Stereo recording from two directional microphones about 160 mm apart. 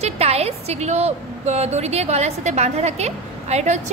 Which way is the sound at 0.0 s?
40° right (ahead or behind).